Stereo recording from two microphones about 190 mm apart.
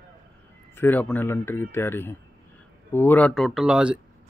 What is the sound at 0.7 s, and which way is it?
A man's voice, 10° left (ahead or behind).